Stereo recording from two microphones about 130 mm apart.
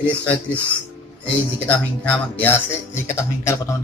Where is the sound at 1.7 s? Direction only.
15° left (ahead or behind).